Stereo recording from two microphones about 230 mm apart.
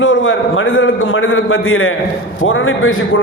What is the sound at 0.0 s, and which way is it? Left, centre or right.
A man's voice, left.